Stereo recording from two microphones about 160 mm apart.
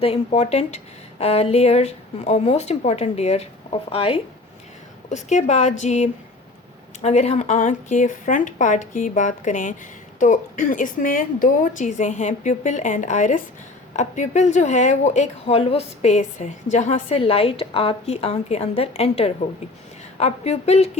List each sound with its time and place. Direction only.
0.0 s speech: 40° left (ahead or behind)
5.0 s speech: 50° left (ahead or behind)